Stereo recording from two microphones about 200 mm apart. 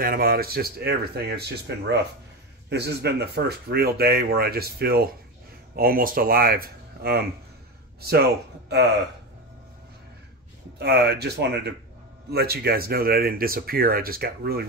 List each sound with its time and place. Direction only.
0.0 s speech: 50° right (ahead or behind)
10.8 s speech: 55° right (ahead or behind)